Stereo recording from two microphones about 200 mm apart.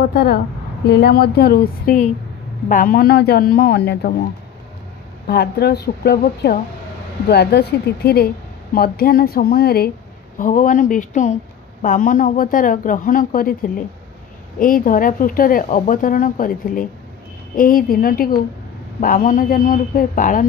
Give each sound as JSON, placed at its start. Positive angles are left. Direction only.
{"t": 0.1, "sound": "speech", "side_deg": 50}
{"t": 5.2, "sound": "speech", "side_deg": 50}